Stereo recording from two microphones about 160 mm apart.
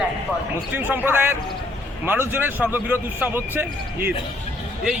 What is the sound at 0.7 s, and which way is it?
Speech, 10° right (ahead or behind).